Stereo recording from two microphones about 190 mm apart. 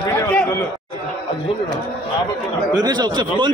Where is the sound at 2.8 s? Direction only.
20° right (ahead or behind).